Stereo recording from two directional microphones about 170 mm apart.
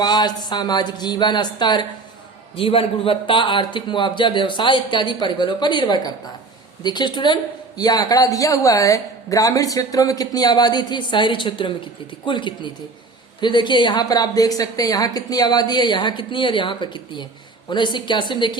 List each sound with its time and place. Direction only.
0.0 s speech: 25° left (ahead or behind)